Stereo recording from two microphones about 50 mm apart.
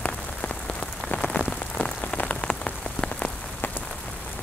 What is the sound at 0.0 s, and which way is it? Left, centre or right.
Rain on surface, left.